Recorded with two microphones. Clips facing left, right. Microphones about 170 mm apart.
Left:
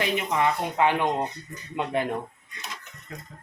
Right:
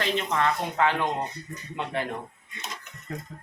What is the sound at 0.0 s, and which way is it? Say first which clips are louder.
Speech: left 1 dB; 15° left (ahead or behind).